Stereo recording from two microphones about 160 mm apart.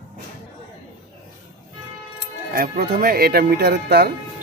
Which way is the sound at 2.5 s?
65° right (ahead or behind).